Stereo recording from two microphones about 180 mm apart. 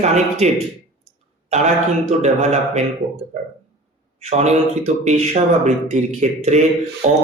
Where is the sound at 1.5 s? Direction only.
40° right (ahead or behind).